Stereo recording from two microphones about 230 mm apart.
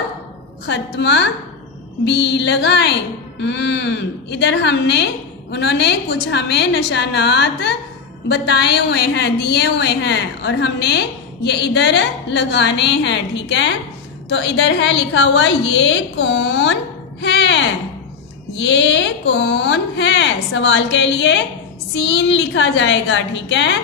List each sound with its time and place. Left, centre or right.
0.7 s speech: left